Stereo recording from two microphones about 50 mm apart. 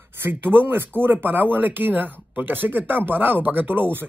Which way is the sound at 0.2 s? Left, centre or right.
Right.